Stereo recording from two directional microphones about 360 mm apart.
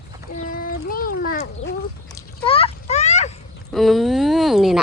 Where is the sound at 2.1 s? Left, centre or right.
Centre.